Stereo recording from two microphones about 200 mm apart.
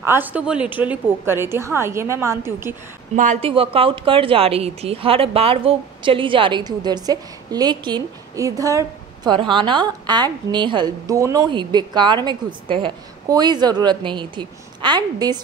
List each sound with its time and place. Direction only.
0.0 s a woman's voice: 10° right (ahead or behind)
3.2 s a woman's voice: 35° right (ahead or behind)